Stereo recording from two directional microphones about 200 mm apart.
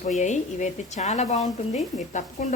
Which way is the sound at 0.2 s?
35° left (ahead or behind).